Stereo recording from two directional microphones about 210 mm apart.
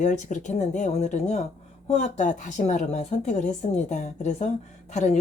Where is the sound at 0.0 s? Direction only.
35° left (ahead or behind).